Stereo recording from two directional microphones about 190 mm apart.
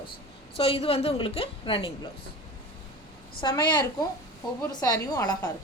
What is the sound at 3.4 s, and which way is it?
A woman's voice, 25° left (ahead or behind).